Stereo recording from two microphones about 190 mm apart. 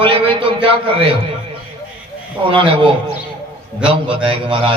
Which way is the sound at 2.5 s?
25° right (ahead or behind).